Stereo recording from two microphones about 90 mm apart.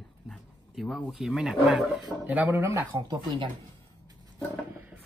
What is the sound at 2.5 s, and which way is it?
Speech, 30° right (ahead or behind).